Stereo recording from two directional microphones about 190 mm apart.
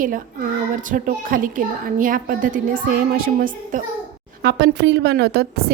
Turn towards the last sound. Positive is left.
turn(degrees=-60)  # may be behind; listen again after turning